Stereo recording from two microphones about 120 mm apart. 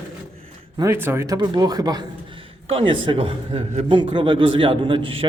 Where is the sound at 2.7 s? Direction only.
50° right (ahead or behind).